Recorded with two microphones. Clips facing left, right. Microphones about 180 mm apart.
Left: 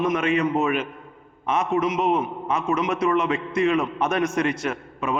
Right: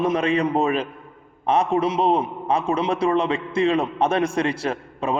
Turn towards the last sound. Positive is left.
turn(degrees=-30)  # may be behind; listen again after turning